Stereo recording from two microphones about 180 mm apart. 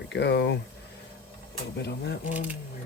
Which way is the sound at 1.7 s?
65° left (ahead or behind).